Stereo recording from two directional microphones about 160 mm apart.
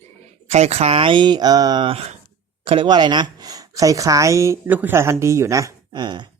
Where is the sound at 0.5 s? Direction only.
40° right (ahead or behind).